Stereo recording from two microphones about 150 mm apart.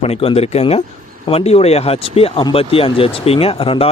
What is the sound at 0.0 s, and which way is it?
Speech, 40° left (ahead or behind).